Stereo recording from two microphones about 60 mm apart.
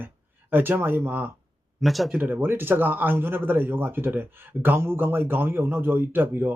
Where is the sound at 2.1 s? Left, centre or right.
Right.